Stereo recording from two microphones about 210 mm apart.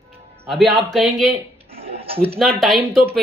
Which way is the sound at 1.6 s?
25° right (ahead or behind).